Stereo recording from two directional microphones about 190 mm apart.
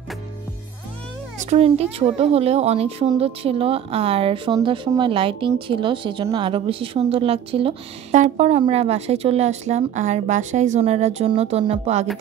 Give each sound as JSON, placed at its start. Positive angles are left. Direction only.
{"t": 1.4, "sound": "a woman's voice", "side_deg": -35}